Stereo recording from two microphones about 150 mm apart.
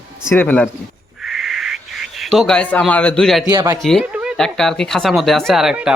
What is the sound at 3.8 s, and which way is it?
Speech, 5° left (ahead or behind).